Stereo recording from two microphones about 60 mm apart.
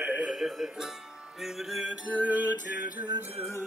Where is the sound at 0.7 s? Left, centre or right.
Centre.